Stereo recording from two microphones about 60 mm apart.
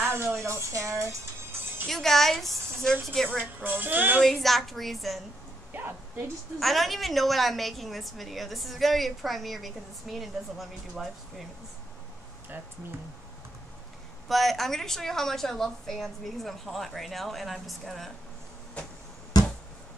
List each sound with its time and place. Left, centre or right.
0.0 s music: right
0.4 s speech: right
1.9 s speech: centre
3.6 s music: right
4.2 s speech: centre
5.7 s speech: right
6.6 s speech: centre
14.2 s speech: centre